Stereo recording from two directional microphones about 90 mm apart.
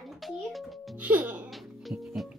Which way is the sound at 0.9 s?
15° right (ahead or behind).